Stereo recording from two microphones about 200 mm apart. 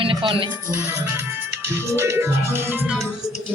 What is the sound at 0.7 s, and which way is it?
Music, 10° right (ahead or behind).